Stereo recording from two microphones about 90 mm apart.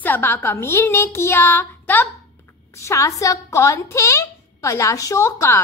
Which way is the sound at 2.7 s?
35° left (ahead or behind).